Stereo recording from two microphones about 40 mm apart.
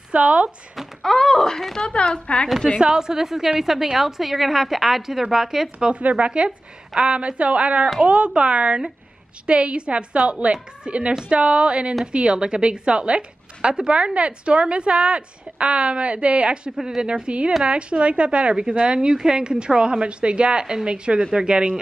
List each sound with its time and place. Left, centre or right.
0.1 s speech: right
1.0 s a woman's voice: centre
2.8 s a woman's voice: centre
5.9 s speech: right
16.8 s a woman's voice: centre
17.1 s speech: right